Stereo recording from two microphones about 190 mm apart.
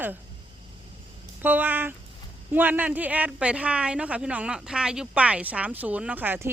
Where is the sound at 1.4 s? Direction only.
10° right (ahead or behind).